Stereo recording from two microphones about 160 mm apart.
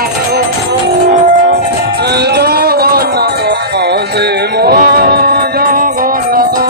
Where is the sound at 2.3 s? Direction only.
80° right.